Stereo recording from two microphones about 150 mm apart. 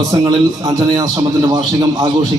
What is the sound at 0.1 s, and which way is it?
A man's voice, 25° right (ahead or behind).